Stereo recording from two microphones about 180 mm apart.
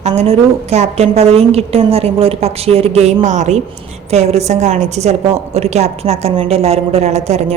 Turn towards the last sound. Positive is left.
turn(degrees=-35)  # may be behind; listen again after turning